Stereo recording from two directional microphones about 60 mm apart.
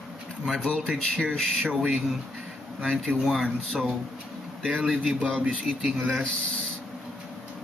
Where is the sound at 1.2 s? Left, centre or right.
Centre.